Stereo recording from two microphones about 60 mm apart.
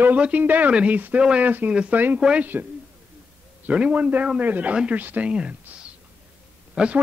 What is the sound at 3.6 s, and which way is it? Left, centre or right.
Speech, right.